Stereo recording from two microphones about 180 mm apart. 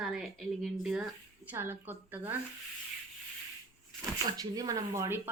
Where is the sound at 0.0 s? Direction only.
Centre (ahead or behind).